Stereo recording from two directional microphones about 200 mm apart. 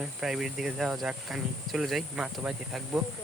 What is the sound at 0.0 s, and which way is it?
Speech, centre (ahead or behind).